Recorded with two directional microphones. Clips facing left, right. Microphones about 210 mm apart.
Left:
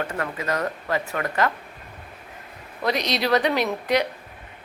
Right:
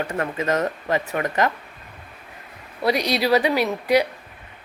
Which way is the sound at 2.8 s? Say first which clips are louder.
Right 3 dB; 10° right (ahead or behind).